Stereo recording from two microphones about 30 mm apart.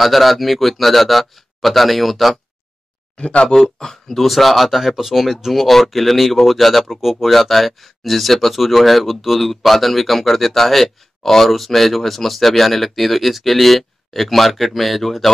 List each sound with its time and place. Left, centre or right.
0.0 s speech: centre
3.2 s speech: left
3.5 s speech: centre